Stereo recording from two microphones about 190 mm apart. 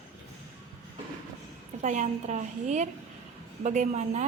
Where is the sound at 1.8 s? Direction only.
40° right (ahead or behind).